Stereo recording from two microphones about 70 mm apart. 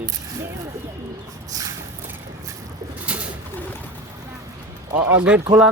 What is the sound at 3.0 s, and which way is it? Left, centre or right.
Pigeon, centre.